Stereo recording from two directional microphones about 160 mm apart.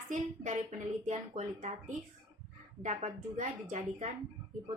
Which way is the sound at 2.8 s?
50° right (ahead or behind).